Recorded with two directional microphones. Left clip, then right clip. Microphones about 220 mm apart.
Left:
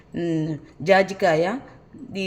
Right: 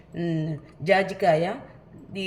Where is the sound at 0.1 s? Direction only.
45° left (ahead or behind).